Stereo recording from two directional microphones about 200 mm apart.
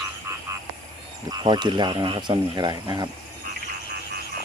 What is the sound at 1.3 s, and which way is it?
Speech, 20° right (ahead or behind).